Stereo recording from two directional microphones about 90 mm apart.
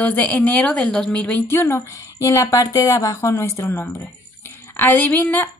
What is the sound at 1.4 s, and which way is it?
Speech, 30° left (ahead or behind).